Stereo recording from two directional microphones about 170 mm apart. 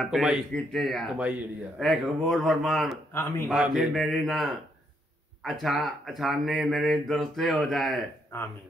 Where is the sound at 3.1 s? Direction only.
15° left (ahead or behind).